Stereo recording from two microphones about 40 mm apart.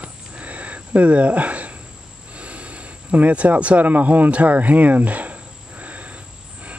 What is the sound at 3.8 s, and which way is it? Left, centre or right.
Speech, right.